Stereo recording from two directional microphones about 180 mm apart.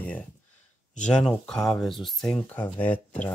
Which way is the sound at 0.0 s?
10° left (ahead or behind).